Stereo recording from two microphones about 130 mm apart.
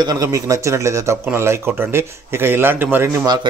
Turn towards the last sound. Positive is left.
turn(degrees=-15)  # may be behind; listen again after turning